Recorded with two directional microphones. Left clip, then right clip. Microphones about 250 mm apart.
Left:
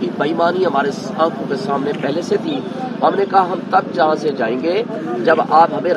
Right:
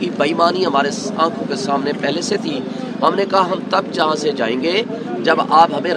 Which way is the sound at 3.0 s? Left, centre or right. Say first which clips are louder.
Left 1 dB; centre.